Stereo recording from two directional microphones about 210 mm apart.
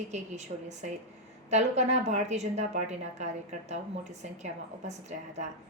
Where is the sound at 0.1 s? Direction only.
35° right (ahead or behind).